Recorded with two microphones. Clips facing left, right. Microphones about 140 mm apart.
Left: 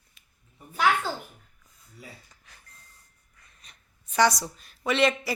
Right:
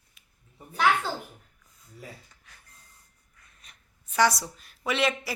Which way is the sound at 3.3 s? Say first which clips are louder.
Left 1 dB; centre (ahead or behind).